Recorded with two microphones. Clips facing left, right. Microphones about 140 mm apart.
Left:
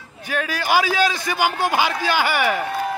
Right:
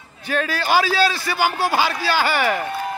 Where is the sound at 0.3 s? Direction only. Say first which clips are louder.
Right 1 dB; 10° left (ahead or behind).